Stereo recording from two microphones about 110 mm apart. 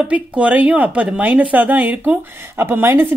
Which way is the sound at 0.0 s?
10° right (ahead or behind).